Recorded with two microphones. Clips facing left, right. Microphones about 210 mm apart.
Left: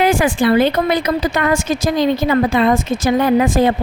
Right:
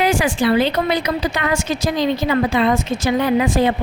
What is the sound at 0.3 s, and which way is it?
A woman's voice, 50° left (ahead or behind).